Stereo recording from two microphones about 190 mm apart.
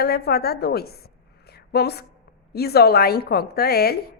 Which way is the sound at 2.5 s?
55° left (ahead or behind).